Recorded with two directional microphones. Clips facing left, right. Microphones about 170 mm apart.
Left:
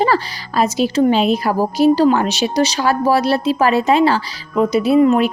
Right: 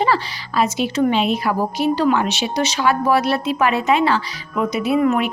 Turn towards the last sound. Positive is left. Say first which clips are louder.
# left 5 dB
turn(degrees=30)  # may be behind; listen again after turning